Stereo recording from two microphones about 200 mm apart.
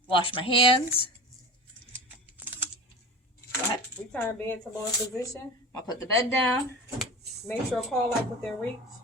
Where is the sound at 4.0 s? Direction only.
5° left (ahead or behind).